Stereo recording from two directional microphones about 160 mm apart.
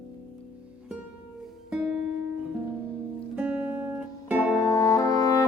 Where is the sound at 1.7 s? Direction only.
5° right (ahead or behind).